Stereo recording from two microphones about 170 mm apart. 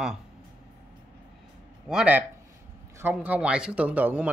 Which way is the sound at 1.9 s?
5° right (ahead or behind).